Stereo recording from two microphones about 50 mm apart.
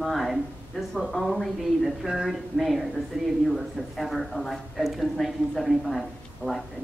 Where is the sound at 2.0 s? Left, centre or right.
Centre.